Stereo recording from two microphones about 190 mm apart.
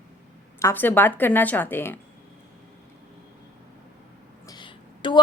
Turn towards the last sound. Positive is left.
turn(degrees=25)  # may be behind; listen again after turning